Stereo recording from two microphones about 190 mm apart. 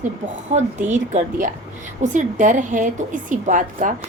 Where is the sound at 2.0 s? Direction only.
40° right (ahead or behind).